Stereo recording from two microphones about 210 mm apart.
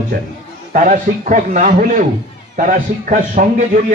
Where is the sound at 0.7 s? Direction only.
40° right (ahead or behind).